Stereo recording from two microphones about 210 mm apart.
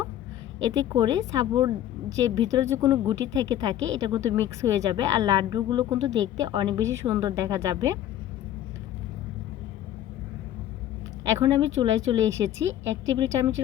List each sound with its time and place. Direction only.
0.7 s a woman's voice: 20° right (ahead or behind)
11.3 s a woman's voice: 15° right (ahead or behind)